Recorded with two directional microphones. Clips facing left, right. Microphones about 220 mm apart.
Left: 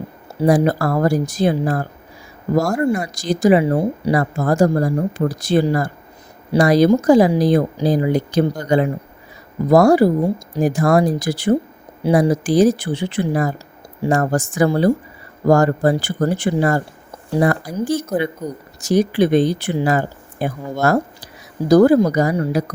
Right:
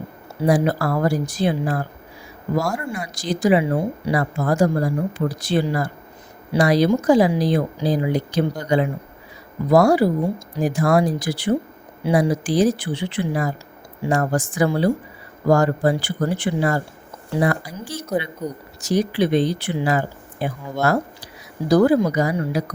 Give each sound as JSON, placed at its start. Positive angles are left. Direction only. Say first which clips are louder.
{"t": 0.4, "sound": "speech", "louder": "left 3 dB", "side_deg": 45}